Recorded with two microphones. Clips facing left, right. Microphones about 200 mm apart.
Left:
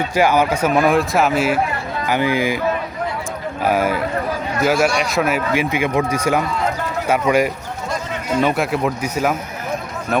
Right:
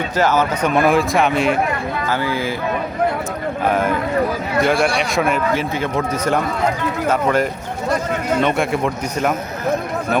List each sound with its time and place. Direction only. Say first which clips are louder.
0.2 s speech: left 1 dB; 10° left (ahead or behind)
2.0 s a man's voice: left 5 dB; 15° left (ahead or behind)
3.7 s a man's voice: left 1 dB; 5° left (ahead or behind)